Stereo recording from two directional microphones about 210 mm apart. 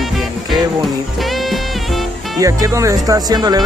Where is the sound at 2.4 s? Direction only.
15° right (ahead or behind).